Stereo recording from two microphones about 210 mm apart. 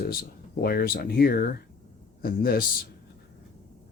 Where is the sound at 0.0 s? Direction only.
45° left (ahead or behind).